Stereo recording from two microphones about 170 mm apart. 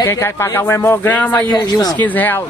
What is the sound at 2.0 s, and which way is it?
Speech, 10° left (ahead or behind).